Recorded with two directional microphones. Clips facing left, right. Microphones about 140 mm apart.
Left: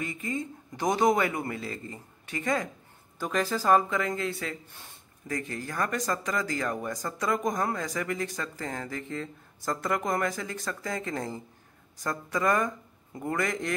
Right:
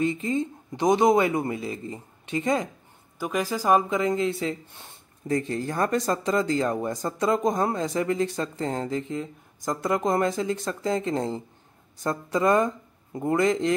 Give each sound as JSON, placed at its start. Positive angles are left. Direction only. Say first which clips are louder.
{"t": 0.0, "sound": "speech", "louder": "right 8 dB", "side_deg": -25}